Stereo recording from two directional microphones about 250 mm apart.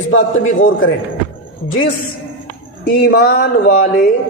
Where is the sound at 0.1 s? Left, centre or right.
Left.